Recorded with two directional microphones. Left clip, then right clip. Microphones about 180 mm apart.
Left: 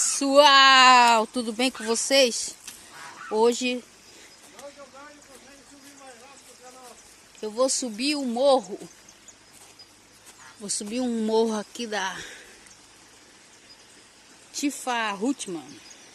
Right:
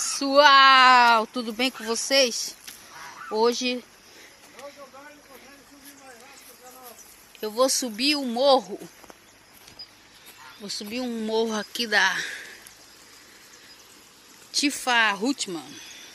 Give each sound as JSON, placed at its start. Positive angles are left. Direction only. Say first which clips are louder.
{"t": 0.0, "sound": "speech", "louder": "even", "side_deg": 20}
{"t": 7.3, "sound": "speech", "louder": "right 2 dB", "side_deg": 0}
{"t": 10.6, "sound": "speech", "louder": "left 2 dB", "side_deg": 30}
{"t": 11.7, "sound": "speech", "louder": "right 8 dB", "side_deg": 0}
{"t": 14.5, "sound": "speech", "louder": "right 5 dB", "side_deg": 0}